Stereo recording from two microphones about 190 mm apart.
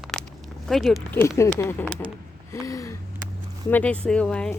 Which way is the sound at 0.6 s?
Centre (ahead or behind).